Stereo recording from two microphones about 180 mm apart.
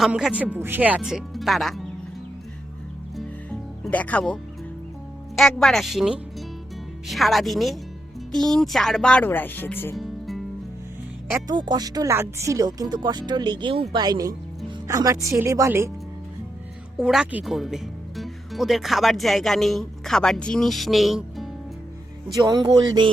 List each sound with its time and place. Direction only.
0.0 s speech: 5° right (ahead or behind)
3.2 s music: 5° left (ahead or behind)
5.4 s speech: centre (ahead or behind)
9.9 s music: centre (ahead or behind)
11.4 s speech: 25° right (ahead or behind)
17.0 s speech: 5° right (ahead or behind)
22.4 s speech: 20° right (ahead or behind)